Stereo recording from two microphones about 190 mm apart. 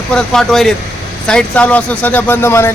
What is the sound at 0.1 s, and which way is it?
Speech, 5° left (ahead or behind).